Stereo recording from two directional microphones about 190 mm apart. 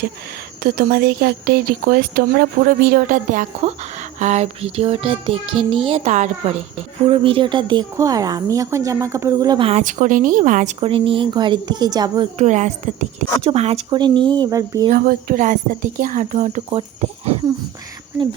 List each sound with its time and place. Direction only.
0.6 s speech: 55° right (ahead or behind)
10.8 s speech: 25° right (ahead or behind)
12.4 s speech: 40° right (ahead or behind); by 14.8 s 20° right (ahead or behind)
14.9 s a woman's voice: 50° right (ahead or behind); by 17.3 s 30° right (ahead or behind)